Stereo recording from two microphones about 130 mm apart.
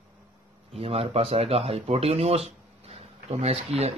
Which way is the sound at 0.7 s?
50° right (ahead or behind).